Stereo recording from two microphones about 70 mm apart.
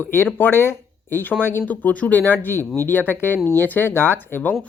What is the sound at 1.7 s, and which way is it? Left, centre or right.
Speech, left.